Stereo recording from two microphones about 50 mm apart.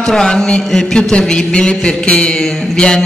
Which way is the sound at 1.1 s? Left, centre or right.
Centre.